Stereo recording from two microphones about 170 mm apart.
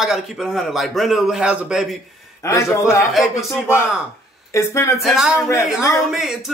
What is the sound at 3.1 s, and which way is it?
Speech, centre (ahead or behind).